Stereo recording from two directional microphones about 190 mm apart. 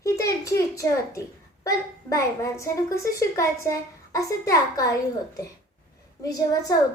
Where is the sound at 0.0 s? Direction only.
15° left (ahead or behind).